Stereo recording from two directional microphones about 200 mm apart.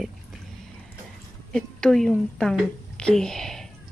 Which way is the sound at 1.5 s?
5° left (ahead or behind).